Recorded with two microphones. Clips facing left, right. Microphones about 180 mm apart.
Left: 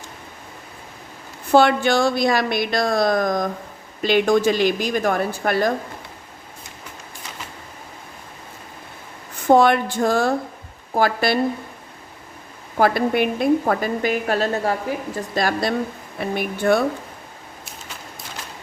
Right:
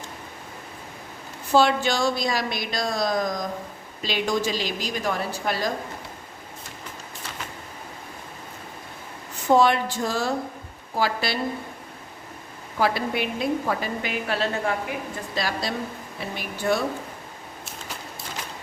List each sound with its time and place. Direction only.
1.5 s speech: 55° left (ahead or behind)
9.5 s a woman's voice: 55° left (ahead or behind)
12.7 s a woman's voice: 50° left (ahead or behind)
15.4 s a woman's voice: 50° left (ahead or behind)